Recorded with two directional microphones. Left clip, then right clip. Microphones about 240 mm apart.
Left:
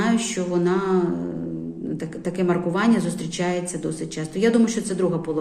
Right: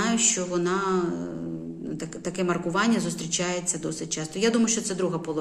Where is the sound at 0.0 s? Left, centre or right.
Centre.